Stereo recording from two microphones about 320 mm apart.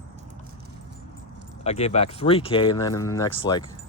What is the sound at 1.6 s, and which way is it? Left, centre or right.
Speech, centre.